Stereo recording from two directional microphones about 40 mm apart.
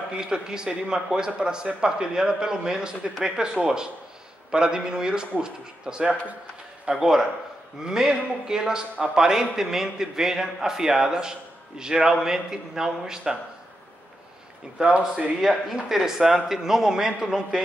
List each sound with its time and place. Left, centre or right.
0.1 s a man's voice: centre
6.9 s a man's voice: centre
15.0 s speech: right
15.4 s a man's voice: centre